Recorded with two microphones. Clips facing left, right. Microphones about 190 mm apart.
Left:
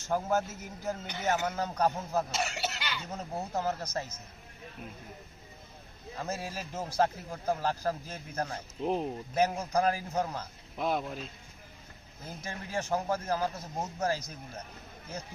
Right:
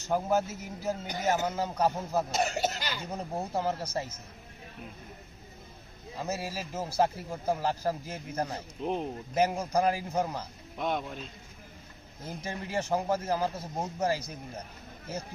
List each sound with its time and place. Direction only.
0.1 s a man's voice: 10° right (ahead or behind)
2.3 s cough: 35° right (ahead or behind)
3.0 s a man's voice: 10° right (ahead or behind)
6.1 s a man's voice: 5° right (ahead or behind)
8.8 s a man's voice: centre (ahead or behind)
9.3 s a man's voice: 10° right (ahead or behind)
10.8 s a man's voice: centre (ahead or behind)
12.4 s a man's voice: 10° right (ahead or behind)